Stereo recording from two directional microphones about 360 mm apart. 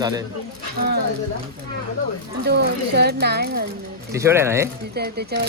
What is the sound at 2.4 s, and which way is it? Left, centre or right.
Speech, right.